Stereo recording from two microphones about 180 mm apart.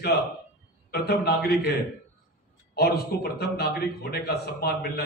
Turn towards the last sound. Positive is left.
turn(degrees=60)  # may be behind; listen again after turning